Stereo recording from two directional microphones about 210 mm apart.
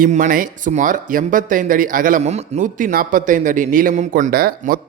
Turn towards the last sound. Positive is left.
turn(degrees=-40)  # may be behind; listen again after turning